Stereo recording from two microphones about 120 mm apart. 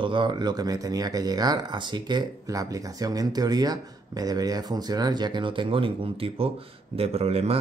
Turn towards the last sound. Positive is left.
turn(degrees=-60)  # may be behind; listen again after turning